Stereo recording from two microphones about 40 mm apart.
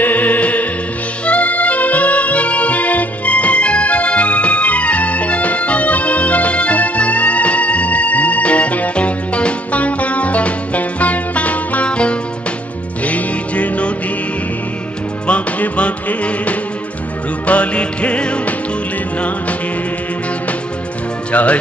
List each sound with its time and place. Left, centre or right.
0.0 s music: left
15.2 s music: left
21.3 s music: left